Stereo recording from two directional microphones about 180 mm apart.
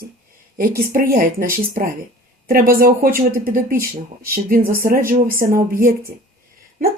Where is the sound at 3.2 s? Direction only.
55° right (ahead or behind).